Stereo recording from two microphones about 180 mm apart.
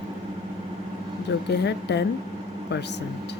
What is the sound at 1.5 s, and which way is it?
Speech, 70° left (ahead or behind).